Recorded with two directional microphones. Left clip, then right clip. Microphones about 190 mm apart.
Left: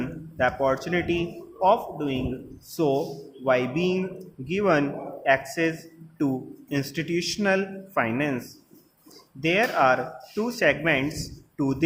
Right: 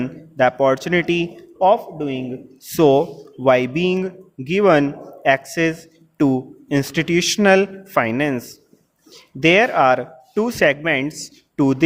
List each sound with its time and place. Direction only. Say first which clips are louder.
0.0 s speech: right 8 dB; 45° right (ahead or behind); by 2.2 s 30° right (ahead or behind)
2.7 s speech: right 10 dB; 45° right (ahead or behind)